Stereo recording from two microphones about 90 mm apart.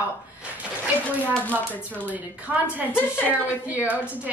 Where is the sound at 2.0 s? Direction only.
20° right (ahead or behind).